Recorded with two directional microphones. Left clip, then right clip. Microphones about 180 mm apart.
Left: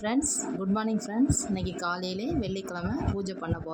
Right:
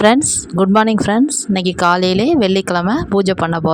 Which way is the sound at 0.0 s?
55° right (ahead or behind).